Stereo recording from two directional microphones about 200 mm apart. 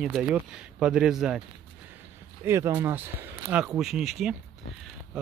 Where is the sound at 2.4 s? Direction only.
15° right (ahead or behind).